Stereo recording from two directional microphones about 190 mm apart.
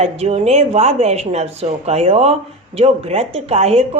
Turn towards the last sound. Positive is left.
turn(degrees=-35)  # may be behind; listen again after turning